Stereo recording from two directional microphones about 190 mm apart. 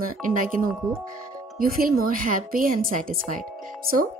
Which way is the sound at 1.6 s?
50° right (ahead or behind).